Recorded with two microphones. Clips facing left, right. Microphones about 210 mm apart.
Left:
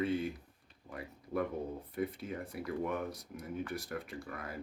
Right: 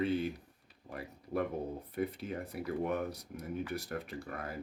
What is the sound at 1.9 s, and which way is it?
Speech, 30° right (ahead or behind).